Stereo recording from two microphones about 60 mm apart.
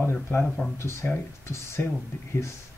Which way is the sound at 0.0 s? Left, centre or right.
Left.